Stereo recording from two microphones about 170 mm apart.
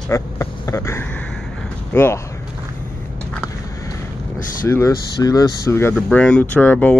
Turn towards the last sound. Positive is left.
turn(degrees=10)  # may be behind; listen again after turning